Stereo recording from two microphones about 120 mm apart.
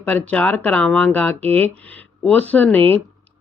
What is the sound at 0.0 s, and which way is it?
Speech, 15° left (ahead or behind).